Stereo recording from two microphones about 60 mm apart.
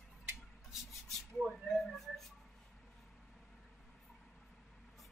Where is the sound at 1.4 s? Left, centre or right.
Centre.